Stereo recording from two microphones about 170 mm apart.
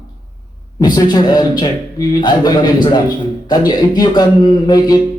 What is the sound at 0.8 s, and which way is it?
A man's voice, 25° left (ahead or behind).